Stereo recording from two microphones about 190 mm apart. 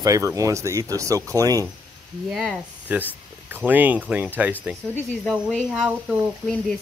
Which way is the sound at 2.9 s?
10° right (ahead or behind).